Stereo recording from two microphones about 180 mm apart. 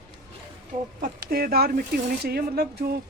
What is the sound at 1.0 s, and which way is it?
Speech, 55° right (ahead or behind).